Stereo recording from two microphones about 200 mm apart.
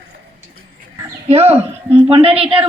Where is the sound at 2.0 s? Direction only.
25° right (ahead or behind).